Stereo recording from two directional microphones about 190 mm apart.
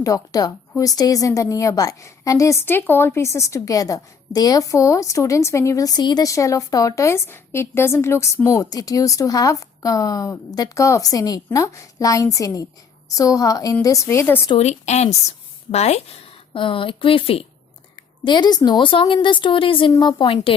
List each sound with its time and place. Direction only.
0.0 s a woman's voice: 20° left (ahead or behind)
14.5 s a woman's voice: 35° left (ahead or behind)